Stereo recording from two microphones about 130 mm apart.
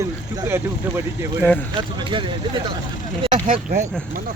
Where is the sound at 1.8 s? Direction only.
40° right (ahead or behind).